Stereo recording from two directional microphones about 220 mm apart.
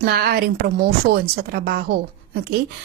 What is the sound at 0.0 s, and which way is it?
A woman's voice, 45° right (ahead or behind).